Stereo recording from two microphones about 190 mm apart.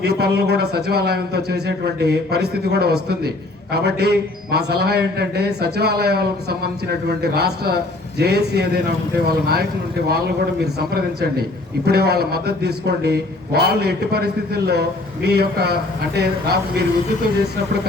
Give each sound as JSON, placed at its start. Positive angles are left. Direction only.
{"t": 0.0, "sound": "a man's voice", "side_deg": -60}
{"t": 10.8, "sound": "a man's voice", "side_deg": -55}